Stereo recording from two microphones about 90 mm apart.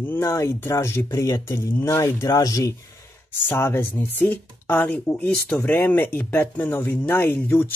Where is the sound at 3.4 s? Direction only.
25° left (ahead or behind).